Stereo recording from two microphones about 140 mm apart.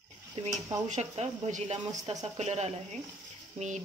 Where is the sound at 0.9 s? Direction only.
55° right (ahead or behind).